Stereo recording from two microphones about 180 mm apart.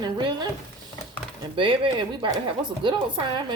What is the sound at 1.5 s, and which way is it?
Speech, 25° right (ahead or behind).